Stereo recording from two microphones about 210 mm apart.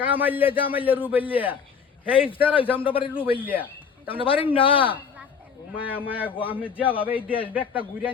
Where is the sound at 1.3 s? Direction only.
10° right (ahead or behind).